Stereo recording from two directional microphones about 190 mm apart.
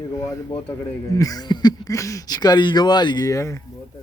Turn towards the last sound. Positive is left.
turn(degrees=15)  # may be behind; listen again after turning